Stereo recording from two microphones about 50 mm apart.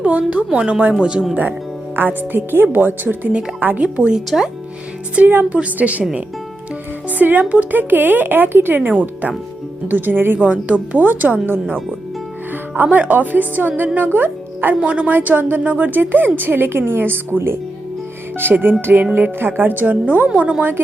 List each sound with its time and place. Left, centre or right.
0.0 s a woman's voice: right
2.0 s a woman's voice: right
3.8 s a woman's voice: right
7.1 s speech: right
10.4 s speech: right
12.7 s speech: right
14.8 s a woman's voice: right